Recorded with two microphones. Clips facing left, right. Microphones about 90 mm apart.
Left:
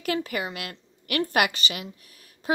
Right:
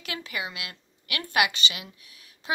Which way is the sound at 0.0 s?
45° left (ahead or behind).